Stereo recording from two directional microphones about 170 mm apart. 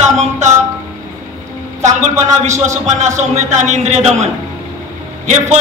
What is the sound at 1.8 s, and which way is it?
Music, 45° right (ahead or behind).